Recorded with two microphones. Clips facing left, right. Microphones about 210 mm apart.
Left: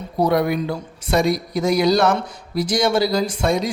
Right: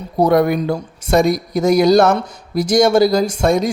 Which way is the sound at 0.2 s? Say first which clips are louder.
Right 5 dB; 45° right (ahead or behind).